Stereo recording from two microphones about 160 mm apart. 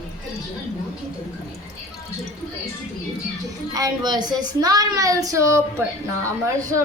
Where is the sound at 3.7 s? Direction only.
20° right (ahead or behind).